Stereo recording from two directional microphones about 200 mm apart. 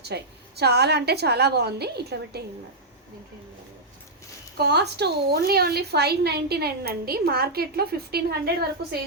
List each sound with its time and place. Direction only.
0.0 s a woman's voice: 55° right (ahead or behind)
4.5 s speech: 55° right (ahead or behind)